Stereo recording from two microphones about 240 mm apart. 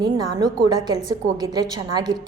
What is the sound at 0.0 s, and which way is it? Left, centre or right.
A woman's voice, centre.